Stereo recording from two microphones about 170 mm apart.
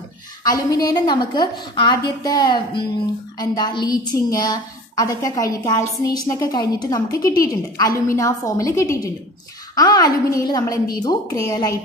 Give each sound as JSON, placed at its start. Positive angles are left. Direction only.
{"t": 0.4, "sound": "a woman's voice", "side_deg": 20}